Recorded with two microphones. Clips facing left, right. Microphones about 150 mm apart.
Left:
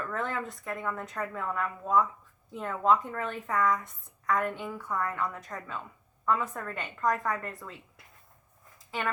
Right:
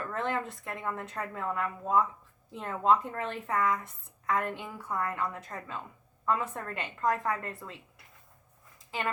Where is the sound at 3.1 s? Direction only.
30° right (ahead or behind).